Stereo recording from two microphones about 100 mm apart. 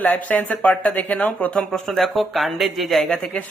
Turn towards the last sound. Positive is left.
turn(degrees=10)  # may be behind; listen again after turning